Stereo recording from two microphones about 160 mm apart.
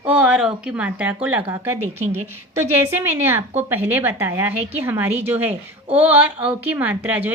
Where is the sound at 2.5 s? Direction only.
15° right (ahead or behind).